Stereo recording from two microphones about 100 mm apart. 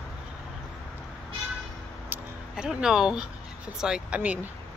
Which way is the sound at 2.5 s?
5° right (ahead or behind).